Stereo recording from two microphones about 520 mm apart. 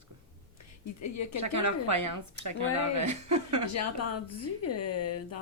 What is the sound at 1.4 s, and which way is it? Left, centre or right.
Speech, right.